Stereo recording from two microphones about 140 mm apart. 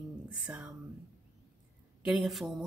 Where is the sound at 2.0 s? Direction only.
Centre (ahead or behind).